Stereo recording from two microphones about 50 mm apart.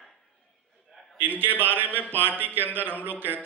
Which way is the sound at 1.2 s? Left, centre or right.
Right.